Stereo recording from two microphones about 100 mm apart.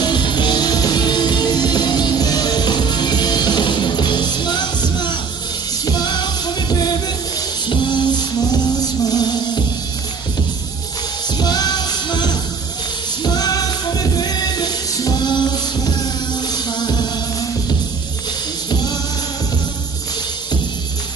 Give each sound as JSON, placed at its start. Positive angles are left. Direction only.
{"t": 0.0, "sound": "music", "side_deg": 50}
{"t": 11.3, "sound": "music", "side_deg": 45}
{"t": 18.7, "sound": "music", "side_deg": 45}